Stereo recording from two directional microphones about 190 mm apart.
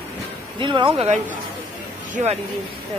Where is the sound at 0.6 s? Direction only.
25° right (ahead or behind).